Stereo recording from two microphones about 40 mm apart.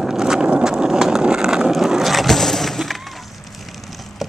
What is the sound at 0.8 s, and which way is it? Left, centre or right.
Vehicle, centre.